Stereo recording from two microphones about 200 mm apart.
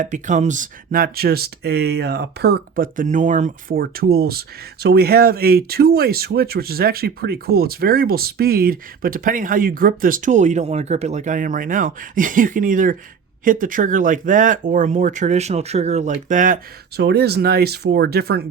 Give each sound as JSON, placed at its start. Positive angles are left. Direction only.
{"t": 0.0, "sound": "speech", "side_deg": -40}
{"t": 17.0, "sound": "speech", "side_deg": -55}